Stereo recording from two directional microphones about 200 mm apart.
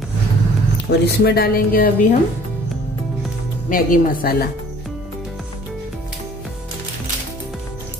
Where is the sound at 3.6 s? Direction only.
40° left (ahead or behind).